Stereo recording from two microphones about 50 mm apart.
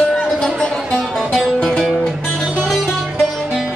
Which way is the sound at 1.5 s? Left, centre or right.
Centre.